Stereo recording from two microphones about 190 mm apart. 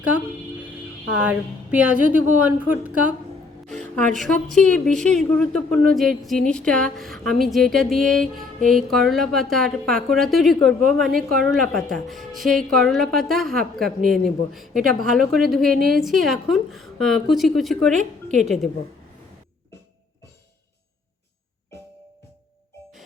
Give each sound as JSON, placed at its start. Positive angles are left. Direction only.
{"t": 1.2, "sound": "a woman's voice", "side_deg": -5}
{"t": 4.1, "sound": "a woman's voice", "side_deg": 5}
{"t": 17.9, "sound": "a woman's voice", "side_deg": -40}
{"t": 18.4, "sound": "a woman's voice", "side_deg": 0}